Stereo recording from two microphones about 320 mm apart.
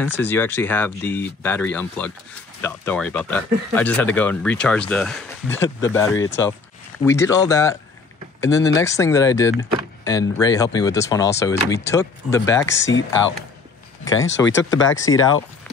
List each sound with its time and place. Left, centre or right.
0.2 s speech: centre
14.0 s speech: left